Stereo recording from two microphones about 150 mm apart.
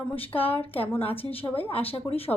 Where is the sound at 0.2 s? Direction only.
40° left (ahead or behind).